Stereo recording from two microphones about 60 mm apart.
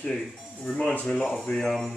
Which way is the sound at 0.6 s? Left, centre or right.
Left.